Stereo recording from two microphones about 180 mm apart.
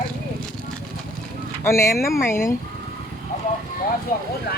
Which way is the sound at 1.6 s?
15° left (ahead or behind).